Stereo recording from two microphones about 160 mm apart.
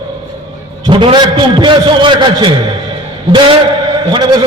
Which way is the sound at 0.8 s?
30° right (ahead or behind).